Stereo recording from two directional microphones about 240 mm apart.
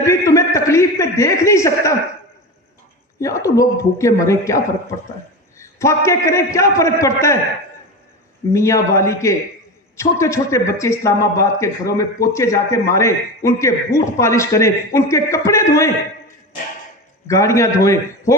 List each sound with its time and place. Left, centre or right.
0.1 s a sound: centre
3.2 s a man's voice: centre
8.5 s a man's voice: centre
17.2 s a man's voice: centre